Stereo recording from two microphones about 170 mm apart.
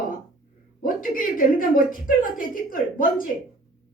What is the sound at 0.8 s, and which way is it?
A woman's voice, 55° left (ahead or behind).